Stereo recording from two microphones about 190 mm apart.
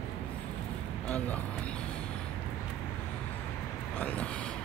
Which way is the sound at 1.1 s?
10° left (ahead or behind).